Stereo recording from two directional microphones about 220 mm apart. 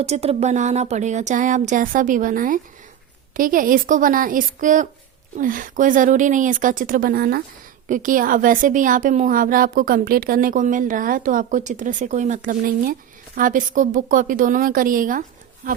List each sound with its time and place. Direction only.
0.0 s a woman's voice: 30° right (ahead or behind)